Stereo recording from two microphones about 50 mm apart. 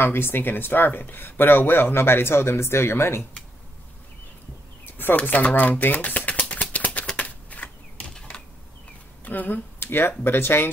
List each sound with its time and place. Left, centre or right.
0.0 s speech: left
4.8 s a sound: left
5.1 s speech: left
6.5 s a sound: left
9.2 s speech: left
9.8 s speech: left